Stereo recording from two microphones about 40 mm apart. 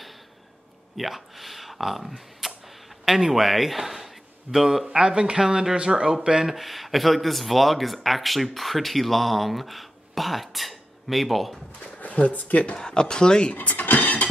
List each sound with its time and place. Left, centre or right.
0.9 s a man's voice: centre
4.9 s speech: right
6.5 s speech: centre
11.8 s speech: left
12.7 s speech: centre
13.6 s dishes: left